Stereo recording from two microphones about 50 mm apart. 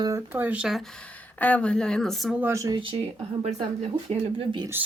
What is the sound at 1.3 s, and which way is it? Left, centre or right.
Speech, left.